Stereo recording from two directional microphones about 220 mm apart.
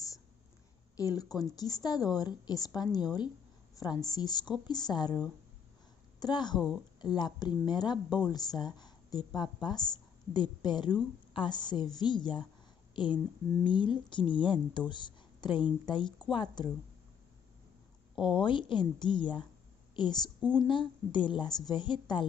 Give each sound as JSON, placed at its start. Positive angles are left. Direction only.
{"t": 0.9, "sound": "a woman's voice", "side_deg": 15}
{"t": 18.1, "sound": "speech", "side_deg": 25}
{"t": 20.3, "sound": "speech", "side_deg": -10}
{"t": 20.6, "sound": "speech", "side_deg": 20}